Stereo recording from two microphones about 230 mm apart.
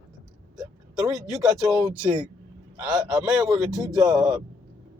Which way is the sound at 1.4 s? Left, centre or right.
Centre.